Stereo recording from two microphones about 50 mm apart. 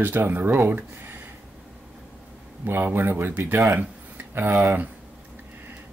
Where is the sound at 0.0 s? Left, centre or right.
Right.